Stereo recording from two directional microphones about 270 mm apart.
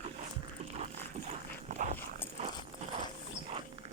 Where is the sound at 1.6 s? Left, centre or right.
Right.